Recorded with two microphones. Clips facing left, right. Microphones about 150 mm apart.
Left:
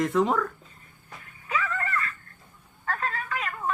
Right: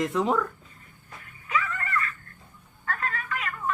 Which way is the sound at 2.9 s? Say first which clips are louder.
Left 1 dB; 35° left (ahead or behind).